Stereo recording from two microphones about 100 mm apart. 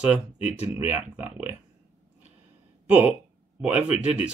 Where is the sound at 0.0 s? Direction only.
10° right (ahead or behind).